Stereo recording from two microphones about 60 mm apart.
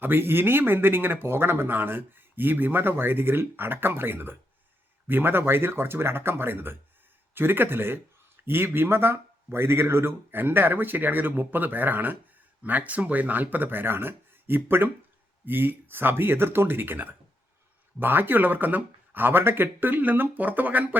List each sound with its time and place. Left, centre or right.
0.0 s speech: right